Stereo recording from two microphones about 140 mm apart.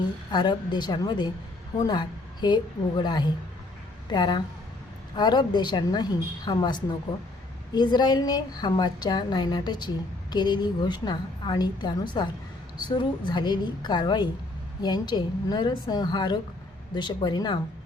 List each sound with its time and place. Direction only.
0.3 s a woman's voice: 30° left (ahead or behind)